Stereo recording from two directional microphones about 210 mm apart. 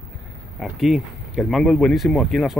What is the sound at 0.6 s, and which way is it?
Speech, centre (ahead or behind).